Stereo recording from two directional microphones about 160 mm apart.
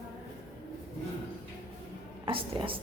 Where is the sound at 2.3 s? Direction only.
35° right (ahead or behind).